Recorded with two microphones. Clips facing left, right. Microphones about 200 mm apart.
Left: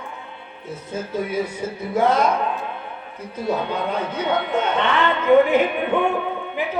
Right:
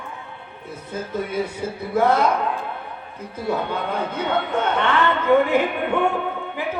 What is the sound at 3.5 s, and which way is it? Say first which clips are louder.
A woman's voice: left 1 dB; 15° left (ahead or behind).